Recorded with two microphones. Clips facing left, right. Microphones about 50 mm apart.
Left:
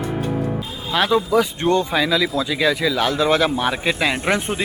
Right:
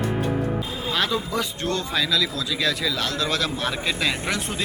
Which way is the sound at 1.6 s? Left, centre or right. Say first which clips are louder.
Left 7 dB; left.